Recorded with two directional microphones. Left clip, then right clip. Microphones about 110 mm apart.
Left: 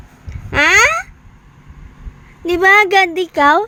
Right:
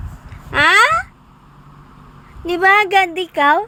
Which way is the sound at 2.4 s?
50° left (ahead or behind).